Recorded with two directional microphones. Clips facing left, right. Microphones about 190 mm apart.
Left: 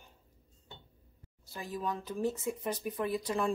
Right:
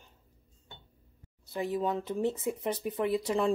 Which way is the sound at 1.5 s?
20° right (ahead or behind).